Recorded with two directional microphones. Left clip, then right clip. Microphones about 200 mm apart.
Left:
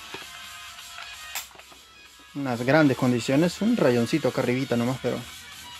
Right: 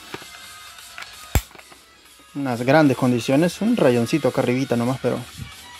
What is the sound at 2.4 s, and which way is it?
Speech, 20° right (ahead or behind).